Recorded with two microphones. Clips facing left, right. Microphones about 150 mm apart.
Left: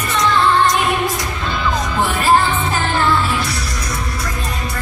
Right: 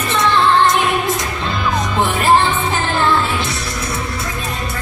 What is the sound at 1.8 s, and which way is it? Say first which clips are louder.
Music: right 1 dB; 20° right (ahead or behind).